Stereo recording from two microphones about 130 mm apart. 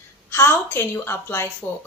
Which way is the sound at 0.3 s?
20° left (ahead or behind).